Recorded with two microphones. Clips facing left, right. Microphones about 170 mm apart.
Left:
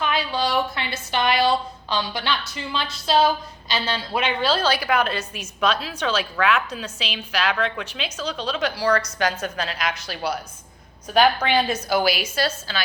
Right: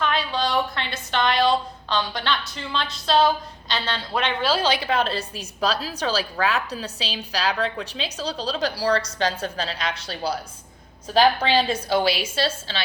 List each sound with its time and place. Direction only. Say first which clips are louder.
0.0 s a woman's voice: even; 5° left (ahead or behind)
4.4 s a woman's voice: even; 15° right (ahead or behind)